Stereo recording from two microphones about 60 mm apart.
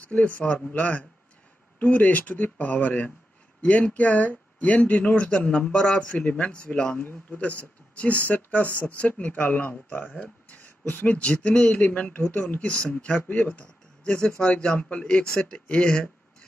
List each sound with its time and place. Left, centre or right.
0.0 s speech: left
7.0 s speech: left